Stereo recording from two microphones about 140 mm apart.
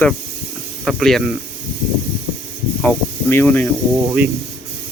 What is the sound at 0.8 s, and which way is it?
Speech, centre (ahead or behind).